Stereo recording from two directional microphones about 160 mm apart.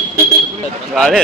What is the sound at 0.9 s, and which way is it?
Speech, centre (ahead or behind).